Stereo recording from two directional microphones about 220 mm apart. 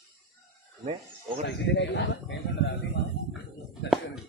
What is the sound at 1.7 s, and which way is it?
Speech, 55° left (ahead or behind).